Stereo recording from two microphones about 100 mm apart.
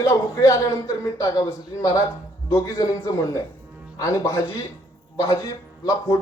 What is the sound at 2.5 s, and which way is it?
A man's voice, 35° left (ahead or behind).